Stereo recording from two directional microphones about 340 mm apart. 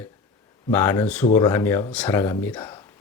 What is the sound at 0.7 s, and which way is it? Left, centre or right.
Speech, centre.